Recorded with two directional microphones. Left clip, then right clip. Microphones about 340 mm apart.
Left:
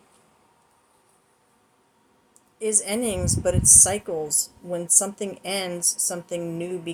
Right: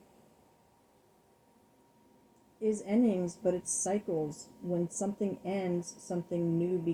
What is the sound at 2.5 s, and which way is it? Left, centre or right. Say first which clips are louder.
A woman's voice: left 5 dB; left.